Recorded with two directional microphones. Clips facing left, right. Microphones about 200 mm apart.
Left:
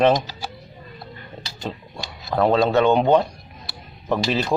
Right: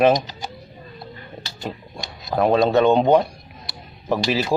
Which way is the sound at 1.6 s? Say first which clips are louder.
Even; 15° right (ahead or behind).